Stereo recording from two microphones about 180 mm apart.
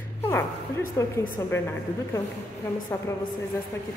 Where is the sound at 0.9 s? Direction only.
15° left (ahead or behind).